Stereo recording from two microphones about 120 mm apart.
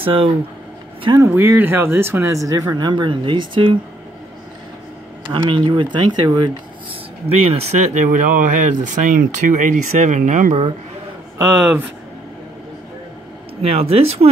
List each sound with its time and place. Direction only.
0.0 s speech: 50° right (ahead or behind)
1.1 s speech: 20° right (ahead or behind); by 3.8 s 45° right (ahead or behind)
5.3 s speech: 45° right (ahead or behind)
7.2 s speech: 60° right (ahead or behind); by 10.6 s 90° right
13.6 s speech: 55° right (ahead or behind)